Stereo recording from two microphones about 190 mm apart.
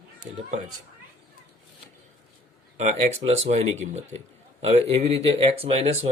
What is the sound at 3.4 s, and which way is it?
A man's voice, 35° right (ahead or behind).